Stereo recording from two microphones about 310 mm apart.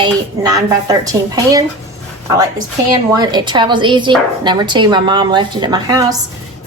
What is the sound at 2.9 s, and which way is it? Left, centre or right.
A woman's voice, centre.